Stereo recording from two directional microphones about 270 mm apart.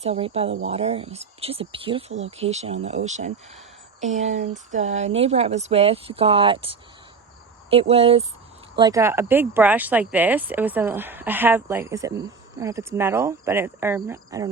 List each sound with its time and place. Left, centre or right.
0.0 s speech: right